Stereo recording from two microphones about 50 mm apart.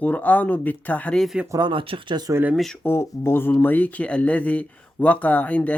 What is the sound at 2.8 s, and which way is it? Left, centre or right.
Speech, left.